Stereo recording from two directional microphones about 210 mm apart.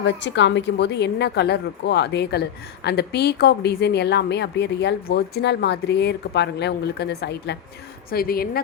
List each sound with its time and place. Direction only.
0.0 s a woman's voice: 55° left (ahead or behind)